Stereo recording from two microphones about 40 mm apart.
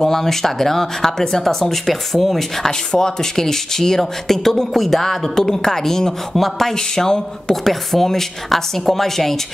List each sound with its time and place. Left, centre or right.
0.0 s speech: centre
6.7 s speech: centre